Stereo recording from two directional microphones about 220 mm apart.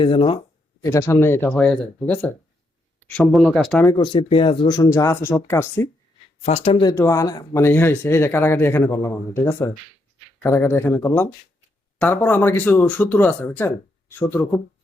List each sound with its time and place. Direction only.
0.0 s speech: 20° left (ahead or behind); by 3.8 s centre (ahead or behind)
3.8 s speech: 20° left (ahead or behind)
6.4 s speech: 25° left (ahead or behind)
6.9 s speech: 15° left (ahead or behind)